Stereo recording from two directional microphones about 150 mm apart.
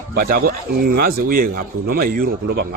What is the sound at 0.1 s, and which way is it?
A man's voice, 90° right.